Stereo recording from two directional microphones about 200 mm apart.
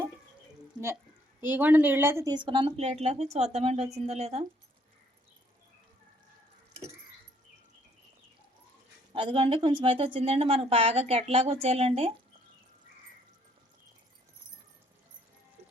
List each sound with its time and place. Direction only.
1.4 s speech: 10° right (ahead or behind)
2.5 s speech: 30° right (ahead or behind)
9.1 s a woman's voice: 25° right (ahead or behind)